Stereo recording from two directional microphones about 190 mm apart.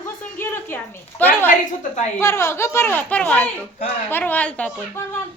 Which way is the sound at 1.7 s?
35° left (ahead or behind).